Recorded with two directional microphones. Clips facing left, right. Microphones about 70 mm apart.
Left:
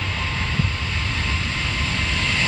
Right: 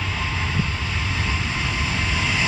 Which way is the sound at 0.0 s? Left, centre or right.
Centre.